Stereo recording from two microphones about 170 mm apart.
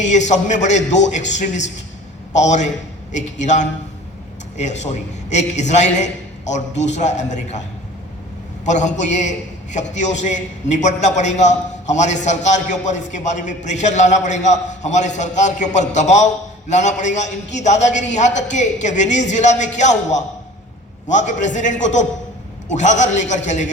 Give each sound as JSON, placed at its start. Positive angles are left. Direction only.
{"t": 0.0, "sound": "a man's voice", "side_deg": 45}
{"t": 8.6, "sound": "a man's voice", "side_deg": 45}